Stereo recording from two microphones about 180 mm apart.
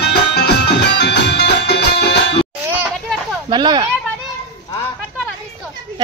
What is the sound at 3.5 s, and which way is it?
Speech, 25° right (ahead or behind).